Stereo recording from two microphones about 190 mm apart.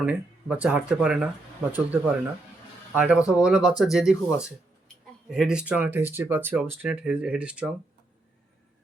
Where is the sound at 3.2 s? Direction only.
15° left (ahead or behind).